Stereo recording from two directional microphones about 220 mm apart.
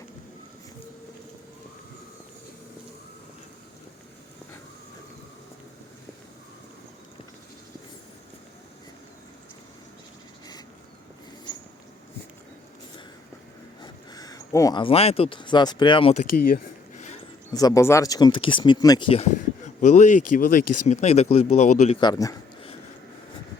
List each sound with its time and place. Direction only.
13.8 s speech: 15° left (ahead or behind)
17.5 s speech: 15° left (ahead or behind)
22.0 s a man's voice: 15° left (ahead or behind)